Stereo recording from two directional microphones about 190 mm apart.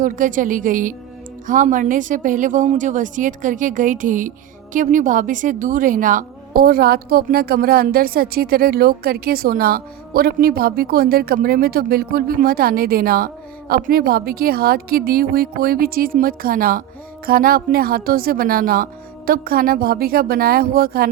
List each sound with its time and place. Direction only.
0.0 s a woman's voice: 45° right (ahead or behind)